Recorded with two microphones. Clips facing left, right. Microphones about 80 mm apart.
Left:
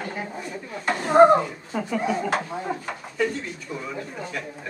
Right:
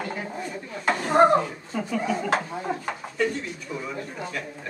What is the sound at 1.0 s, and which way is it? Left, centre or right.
Speech, centre.